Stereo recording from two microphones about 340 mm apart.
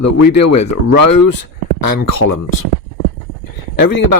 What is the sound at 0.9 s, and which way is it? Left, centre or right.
Speech, left.